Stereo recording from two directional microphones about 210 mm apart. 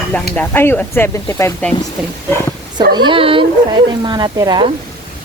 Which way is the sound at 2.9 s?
20° right (ahead or behind).